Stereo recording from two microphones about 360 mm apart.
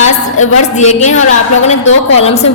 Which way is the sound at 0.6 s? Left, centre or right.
Centre.